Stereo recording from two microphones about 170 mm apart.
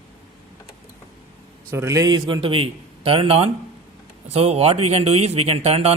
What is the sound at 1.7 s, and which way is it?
Speech, 15° right (ahead or behind).